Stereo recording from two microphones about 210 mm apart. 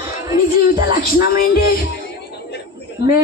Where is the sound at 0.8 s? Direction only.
45° left (ahead or behind).